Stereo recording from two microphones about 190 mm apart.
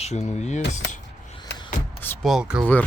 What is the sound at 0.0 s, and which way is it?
Speech, 35° left (ahead or behind).